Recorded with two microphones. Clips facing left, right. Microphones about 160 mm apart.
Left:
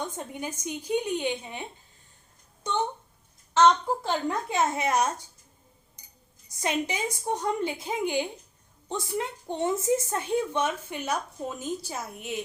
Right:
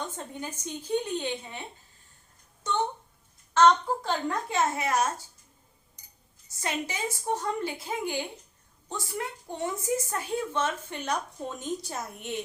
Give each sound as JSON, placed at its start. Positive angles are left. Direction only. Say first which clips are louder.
{"t": 0.1, "sound": "speech", "louder": "left 2 dB", "side_deg": 15}
{"t": 4.0, "sound": "a woman's voice", "louder": "left 1 dB", "side_deg": 20}
{"t": 6.5, "sound": "a woman's voice", "louder": "left 4 dB", "side_deg": 20}